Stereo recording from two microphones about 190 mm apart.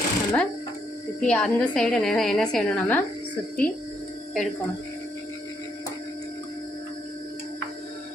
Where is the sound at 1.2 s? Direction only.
5° left (ahead or behind).